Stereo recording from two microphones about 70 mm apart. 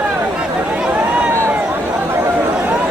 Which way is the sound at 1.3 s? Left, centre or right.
Right.